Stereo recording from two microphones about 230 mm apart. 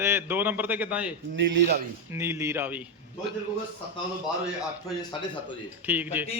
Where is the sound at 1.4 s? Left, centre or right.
Right.